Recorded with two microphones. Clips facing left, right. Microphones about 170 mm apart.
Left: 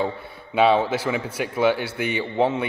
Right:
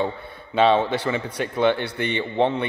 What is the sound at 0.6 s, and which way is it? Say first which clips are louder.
A man's voice: even; 5° left (ahead or behind).